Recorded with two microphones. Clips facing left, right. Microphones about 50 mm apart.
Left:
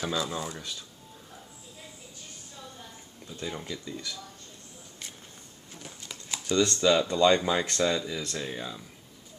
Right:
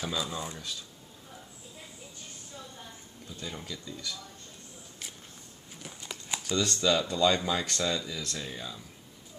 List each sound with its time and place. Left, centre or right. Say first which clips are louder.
0.0 s speech: left 3 dB; centre
3.3 s speech: left 4 dB; centre
5.8 s a sound: right 1 dB; centre
6.5 s speech: left 5 dB; centre
6.8 s speech: left 3 dB; centre